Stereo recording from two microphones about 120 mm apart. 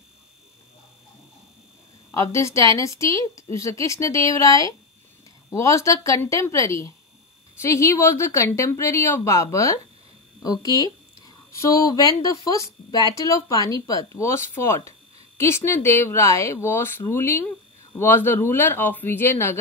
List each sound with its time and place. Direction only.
2.0 s speech: 25° left (ahead or behind)